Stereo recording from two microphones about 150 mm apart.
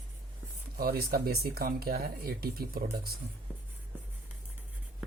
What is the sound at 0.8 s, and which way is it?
Speech, 85° right.